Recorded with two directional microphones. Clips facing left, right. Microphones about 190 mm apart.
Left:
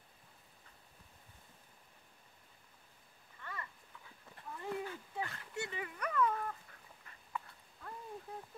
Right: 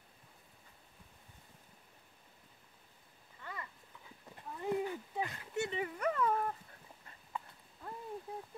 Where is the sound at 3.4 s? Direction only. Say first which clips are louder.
Right 1 dB; 20° right (ahead or behind).